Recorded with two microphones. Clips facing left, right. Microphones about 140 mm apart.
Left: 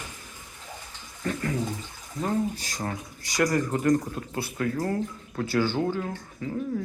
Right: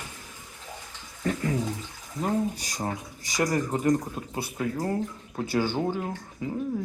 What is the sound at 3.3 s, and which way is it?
Speech, 15° right (ahead or behind).